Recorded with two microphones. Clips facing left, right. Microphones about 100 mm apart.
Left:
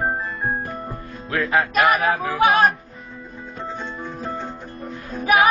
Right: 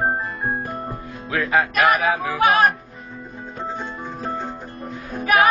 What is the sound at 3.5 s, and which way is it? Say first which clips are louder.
Music: right 1 dB; 5° right (ahead or behind).